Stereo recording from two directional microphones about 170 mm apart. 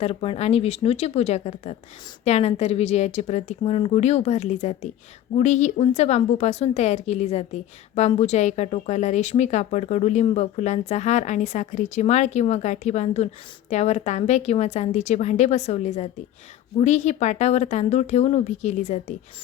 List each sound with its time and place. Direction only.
0.0 s a woman's voice: 35° left (ahead or behind)